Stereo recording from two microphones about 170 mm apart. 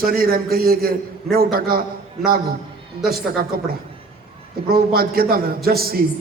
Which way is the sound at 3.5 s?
60° right (ahead or behind).